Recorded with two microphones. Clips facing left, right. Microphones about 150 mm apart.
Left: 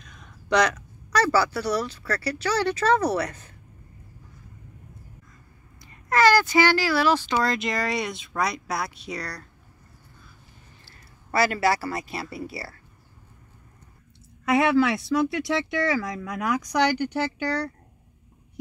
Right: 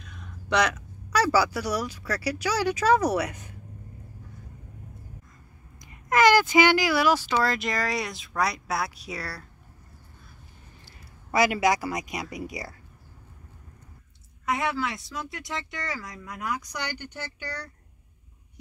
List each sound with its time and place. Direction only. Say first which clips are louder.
0.0 s speech: right 4 dB; 5° right (ahead or behind)
5.9 s speech: even; 15° right (ahead or behind)
11.3 s speech: even; 15° right (ahead or behind)
14.4 s speech: left 8 dB; 70° left (ahead or behind); by 17.6 s 90° left